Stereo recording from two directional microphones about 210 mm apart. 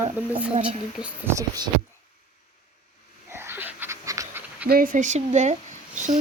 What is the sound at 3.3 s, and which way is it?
Pant, 10° right (ahead or behind).